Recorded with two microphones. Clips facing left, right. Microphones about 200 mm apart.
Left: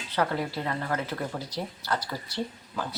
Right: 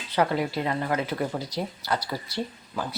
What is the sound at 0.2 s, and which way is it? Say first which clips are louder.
Speech: right 4 dB; 15° right (ahead or behind).